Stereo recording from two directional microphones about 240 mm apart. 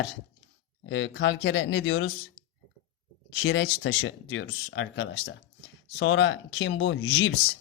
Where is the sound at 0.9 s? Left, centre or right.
Left.